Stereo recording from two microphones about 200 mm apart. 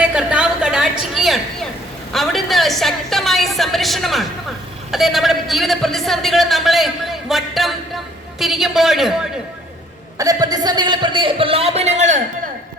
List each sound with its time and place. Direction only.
0.1 s a sound: 5° right (ahead or behind)
4.9 s a man's voice: centre (ahead or behind)
10.2 s a man's voice: 20° right (ahead or behind); by 12.2 s 35° right (ahead or behind)